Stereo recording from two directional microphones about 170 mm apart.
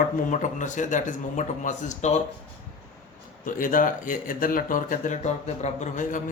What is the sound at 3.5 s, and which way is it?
A man's voice, 55° left (ahead or behind).